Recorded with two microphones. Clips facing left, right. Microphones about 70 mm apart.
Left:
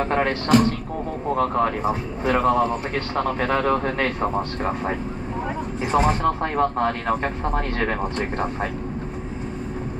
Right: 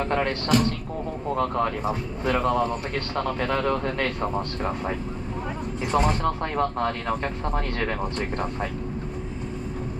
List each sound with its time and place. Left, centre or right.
0.0 s a sound: left
0.3 s speech: left
1.4 s speech: left
5.8 s speech: left